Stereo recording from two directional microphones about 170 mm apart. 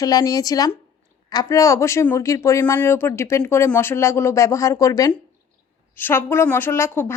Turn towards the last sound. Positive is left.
turn(degrees=15)  # may be behind; listen again after turning